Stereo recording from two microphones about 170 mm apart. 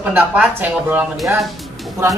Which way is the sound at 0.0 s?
10° right (ahead or behind).